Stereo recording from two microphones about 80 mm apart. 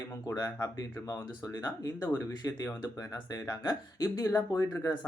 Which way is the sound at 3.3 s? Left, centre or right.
Left.